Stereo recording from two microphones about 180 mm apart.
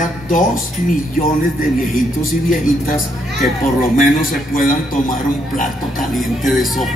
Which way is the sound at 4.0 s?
50° left (ahead or behind).